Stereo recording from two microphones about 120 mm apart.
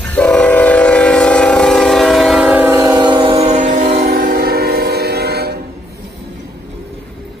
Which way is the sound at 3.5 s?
85° right.